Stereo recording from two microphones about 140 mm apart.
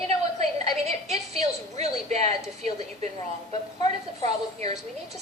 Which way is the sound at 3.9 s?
50° right (ahead or behind).